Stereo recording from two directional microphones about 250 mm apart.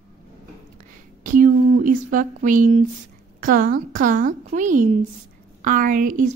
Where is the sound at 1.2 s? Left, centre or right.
Right.